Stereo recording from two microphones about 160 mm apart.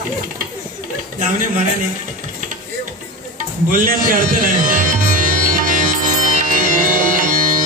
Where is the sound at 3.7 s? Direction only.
60° right (ahead or behind).